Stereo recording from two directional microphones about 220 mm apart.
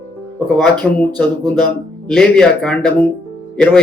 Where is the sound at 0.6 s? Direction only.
5° left (ahead or behind).